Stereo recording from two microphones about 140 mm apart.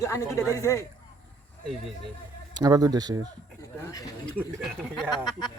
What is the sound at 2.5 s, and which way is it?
Speech, 25° right (ahead or behind).